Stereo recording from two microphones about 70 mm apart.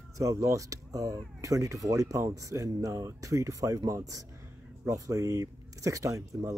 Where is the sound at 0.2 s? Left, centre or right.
Right.